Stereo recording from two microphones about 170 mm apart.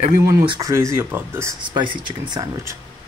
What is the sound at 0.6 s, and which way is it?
Speech, 20° right (ahead or behind).